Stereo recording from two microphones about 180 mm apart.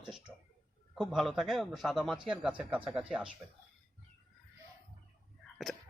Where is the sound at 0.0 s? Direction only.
5° right (ahead or behind).